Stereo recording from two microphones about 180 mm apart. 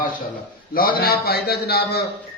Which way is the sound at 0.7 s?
55° left (ahead or behind).